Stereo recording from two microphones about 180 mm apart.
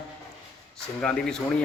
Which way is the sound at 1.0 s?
5° left (ahead or behind).